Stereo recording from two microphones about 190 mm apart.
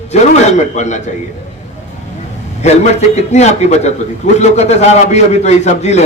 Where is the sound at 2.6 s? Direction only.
35° left (ahead or behind).